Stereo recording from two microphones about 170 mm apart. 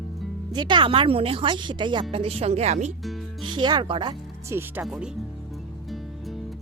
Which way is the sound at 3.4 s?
25° right (ahead or behind).